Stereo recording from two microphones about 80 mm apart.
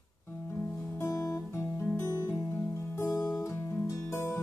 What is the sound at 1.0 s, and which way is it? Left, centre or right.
Guitar, left.